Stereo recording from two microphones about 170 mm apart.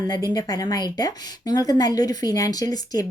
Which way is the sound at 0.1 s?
25° left (ahead or behind).